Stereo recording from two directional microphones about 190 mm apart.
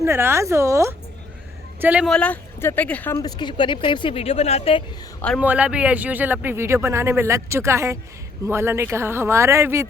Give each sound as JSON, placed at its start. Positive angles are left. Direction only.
{"t": 0.0, "sound": "a man's voice", "side_deg": -15}
{"t": 2.0, "sound": "speech", "side_deg": 5}
{"t": 3.2, "sound": "speech", "side_deg": 20}
{"t": 5.4, "sound": "a man's voice", "side_deg": -5}